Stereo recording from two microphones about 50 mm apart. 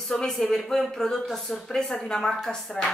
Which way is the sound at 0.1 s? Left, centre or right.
Centre.